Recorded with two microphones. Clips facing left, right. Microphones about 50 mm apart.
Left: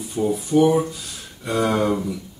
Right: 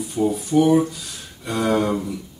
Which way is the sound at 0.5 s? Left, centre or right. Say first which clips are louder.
Left 1 dB; left.